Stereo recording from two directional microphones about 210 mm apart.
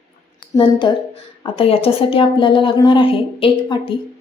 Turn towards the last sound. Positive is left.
turn(degrees=25)  # may be behind; listen again after turning